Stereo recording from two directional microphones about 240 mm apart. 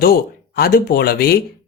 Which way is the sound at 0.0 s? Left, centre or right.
Left.